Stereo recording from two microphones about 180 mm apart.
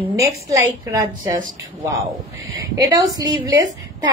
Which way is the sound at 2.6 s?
20° right (ahead or behind).